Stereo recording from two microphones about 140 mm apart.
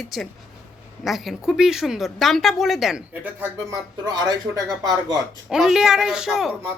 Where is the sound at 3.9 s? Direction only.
30° right (ahead or behind).